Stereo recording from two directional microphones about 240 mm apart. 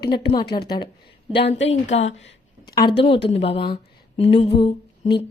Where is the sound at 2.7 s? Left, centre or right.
Centre.